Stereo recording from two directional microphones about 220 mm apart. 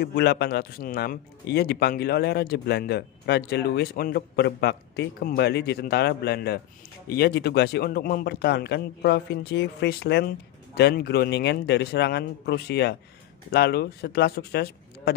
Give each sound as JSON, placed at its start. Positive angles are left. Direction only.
{"t": 0.0, "sound": "speech", "side_deg": 45}